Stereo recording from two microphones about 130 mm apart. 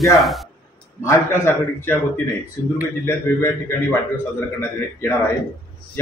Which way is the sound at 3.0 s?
20° left (ahead or behind).